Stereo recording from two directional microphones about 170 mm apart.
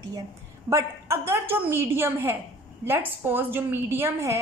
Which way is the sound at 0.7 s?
15° right (ahead or behind).